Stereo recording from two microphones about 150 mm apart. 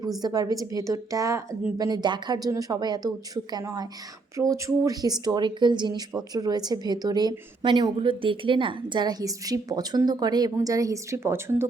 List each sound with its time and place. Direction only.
0.2 s speech: 25° right (ahead or behind)